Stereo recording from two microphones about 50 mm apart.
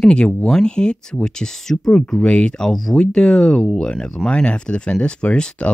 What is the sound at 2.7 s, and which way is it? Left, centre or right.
Speech, centre.